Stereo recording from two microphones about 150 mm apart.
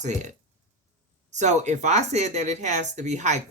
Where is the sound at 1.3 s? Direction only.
50° right (ahead or behind).